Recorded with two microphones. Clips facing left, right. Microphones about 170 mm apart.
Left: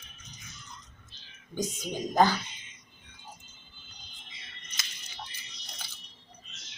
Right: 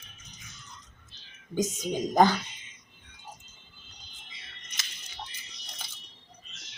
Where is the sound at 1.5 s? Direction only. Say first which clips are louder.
Right 4 dB; 45° right (ahead or behind).